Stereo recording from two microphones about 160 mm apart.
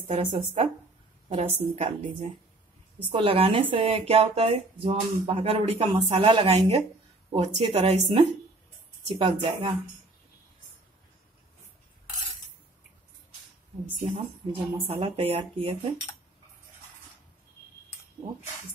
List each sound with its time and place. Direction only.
1.3 s a woman's voice: 40° right (ahead or behind)
3.1 s speech: 35° right (ahead or behind)
14.0 s speech: 35° right (ahead or behind)